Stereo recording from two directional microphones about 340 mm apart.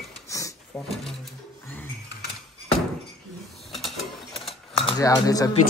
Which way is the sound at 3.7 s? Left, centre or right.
Centre.